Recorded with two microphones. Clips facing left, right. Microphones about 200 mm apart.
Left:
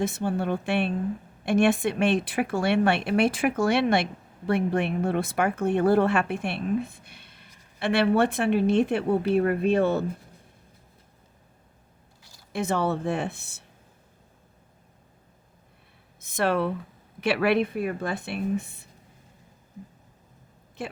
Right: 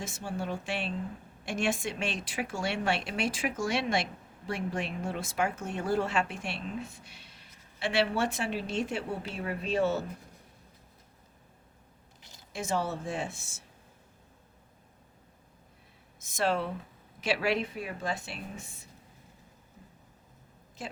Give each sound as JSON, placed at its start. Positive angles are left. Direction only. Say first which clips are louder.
{"t": 0.0, "sound": "a woman's voice", "louder": "left 9 dB", "side_deg": 60}
{"t": 12.2, "sound": "a sound", "louder": "right 1 dB", "side_deg": -20}
{"t": 12.5, "sound": "a woman's voice", "louder": "left 6 dB", "side_deg": 60}
{"t": 16.2, "sound": "a woman's voice", "louder": "left 5 dB", "side_deg": 60}
{"t": 20.8, "sound": "a woman's voice", "louder": "left 6 dB", "side_deg": 60}